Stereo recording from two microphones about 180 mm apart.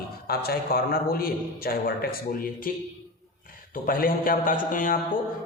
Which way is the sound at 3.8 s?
50° left (ahead or behind).